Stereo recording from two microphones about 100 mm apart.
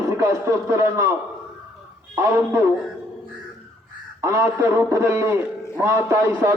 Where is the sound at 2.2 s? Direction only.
25° right (ahead or behind).